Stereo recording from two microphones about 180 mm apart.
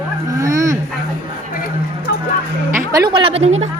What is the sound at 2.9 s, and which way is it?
Speech, 20° right (ahead or behind).